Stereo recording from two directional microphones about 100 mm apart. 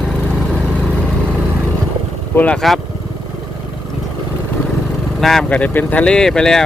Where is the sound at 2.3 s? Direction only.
15° left (ahead or behind).